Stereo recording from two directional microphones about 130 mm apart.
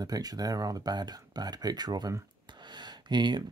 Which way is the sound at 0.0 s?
30° right (ahead or behind).